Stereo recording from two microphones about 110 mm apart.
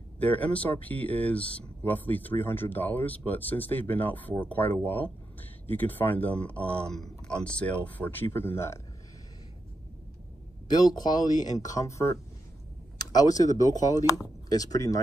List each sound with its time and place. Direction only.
0.2 s speech: 15° left (ahead or behind)
10.7 s speech: 35° left (ahead or behind)